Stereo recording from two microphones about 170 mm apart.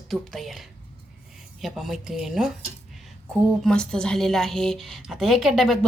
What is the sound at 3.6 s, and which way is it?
A woman's voice, 5° left (ahead or behind).